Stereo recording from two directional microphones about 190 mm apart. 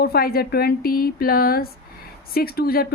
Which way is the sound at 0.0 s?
55° left (ahead or behind).